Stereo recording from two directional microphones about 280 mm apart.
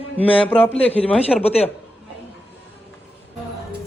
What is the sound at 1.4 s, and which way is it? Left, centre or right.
Speech, left.